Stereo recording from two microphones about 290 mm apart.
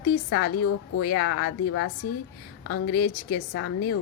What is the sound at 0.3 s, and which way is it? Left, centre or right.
A woman's voice, left.